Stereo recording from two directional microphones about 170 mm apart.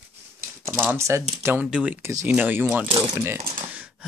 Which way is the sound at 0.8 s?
15° right (ahead or behind).